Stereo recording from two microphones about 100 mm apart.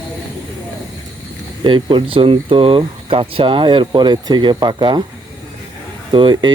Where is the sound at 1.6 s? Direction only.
50° right (ahead or behind).